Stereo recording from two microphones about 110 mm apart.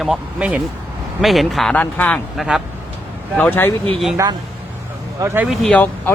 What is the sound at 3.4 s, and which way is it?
Speech, 20° left (ahead or behind).